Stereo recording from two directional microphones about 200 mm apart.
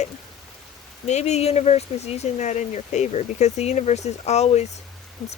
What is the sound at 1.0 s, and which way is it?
Speech, 35° left (ahead or behind).